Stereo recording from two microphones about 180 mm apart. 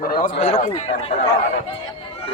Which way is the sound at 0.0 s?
55° left (ahead or behind).